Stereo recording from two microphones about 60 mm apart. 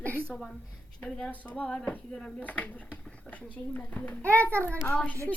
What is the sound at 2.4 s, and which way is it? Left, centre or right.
A woman's voice, left.